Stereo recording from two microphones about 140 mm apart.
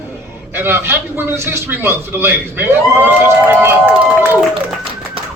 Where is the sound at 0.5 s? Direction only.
15° right (ahead or behind).